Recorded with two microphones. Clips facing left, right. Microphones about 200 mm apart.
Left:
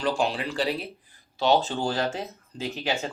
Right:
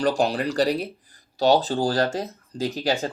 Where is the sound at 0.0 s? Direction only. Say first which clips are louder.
Right 4 dB; 40° right (ahead or behind).